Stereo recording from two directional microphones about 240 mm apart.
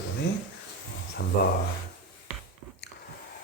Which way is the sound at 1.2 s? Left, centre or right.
Left.